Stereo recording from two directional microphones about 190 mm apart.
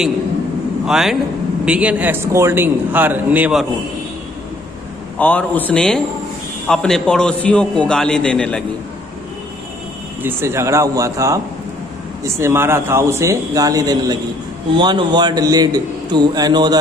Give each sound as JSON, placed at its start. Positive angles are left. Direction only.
{"t": 0.8, "sound": "a man's voice", "side_deg": 0}
{"t": 5.2, "sound": "a man's voice", "side_deg": 10}
{"t": 10.2, "sound": "a man's voice", "side_deg": -15}